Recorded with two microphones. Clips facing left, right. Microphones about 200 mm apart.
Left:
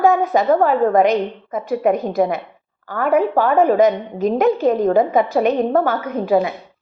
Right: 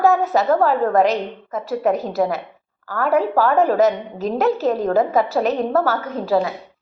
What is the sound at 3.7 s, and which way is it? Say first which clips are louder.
A woman's voice: left 2 dB; 5° right (ahead or behind).